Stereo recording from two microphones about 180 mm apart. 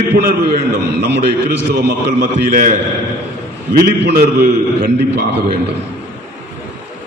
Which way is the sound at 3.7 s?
55° right (ahead or behind).